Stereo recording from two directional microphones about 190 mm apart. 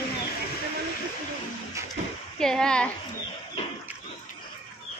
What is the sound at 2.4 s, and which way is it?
Speech, 5° left (ahead or behind).